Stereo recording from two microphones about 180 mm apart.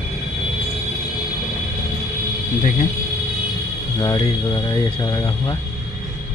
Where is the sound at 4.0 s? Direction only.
25° left (ahead or behind).